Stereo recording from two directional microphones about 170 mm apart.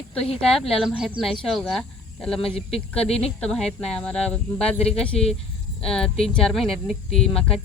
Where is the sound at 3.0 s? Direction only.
35° left (ahead or behind).